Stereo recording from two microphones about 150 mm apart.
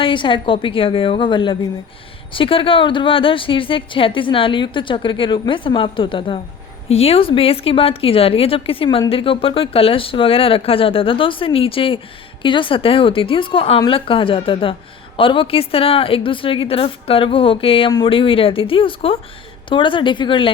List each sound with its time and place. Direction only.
0.0 s a woman's voice: 35° left (ahead or behind)